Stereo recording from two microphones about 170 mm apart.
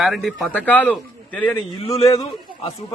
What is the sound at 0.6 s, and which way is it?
Speech, 10° left (ahead or behind).